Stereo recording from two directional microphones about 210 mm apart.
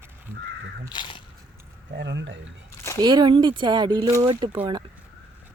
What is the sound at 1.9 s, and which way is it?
Speech, 55° right (ahead or behind).